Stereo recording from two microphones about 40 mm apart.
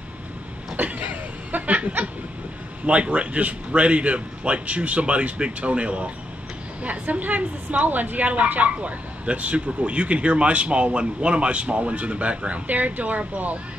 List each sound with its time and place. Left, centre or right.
0.8 s chuckle: right
2.9 s a woman's voice: right